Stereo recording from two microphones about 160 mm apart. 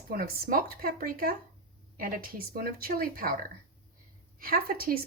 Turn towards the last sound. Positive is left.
turn(degrees=-70)  # may be behind; listen again after turning